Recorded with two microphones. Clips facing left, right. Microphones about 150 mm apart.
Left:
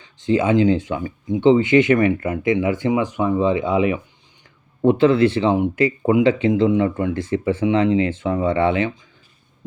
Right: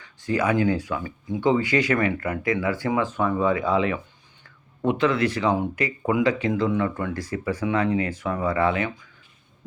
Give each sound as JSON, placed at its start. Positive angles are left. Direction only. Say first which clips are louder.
{"t": 0.0, "sound": "speech", "louder": "left 5 dB", "side_deg": 20}
{"t": 4.8, "sound": "speech", "louder": "left 7 dB", "side_deg": 30}